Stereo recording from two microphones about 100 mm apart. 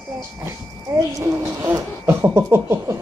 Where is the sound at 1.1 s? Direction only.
30° right (ahead or behind).